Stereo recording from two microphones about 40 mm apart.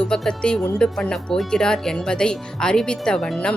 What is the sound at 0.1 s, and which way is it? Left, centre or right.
Speech, centre.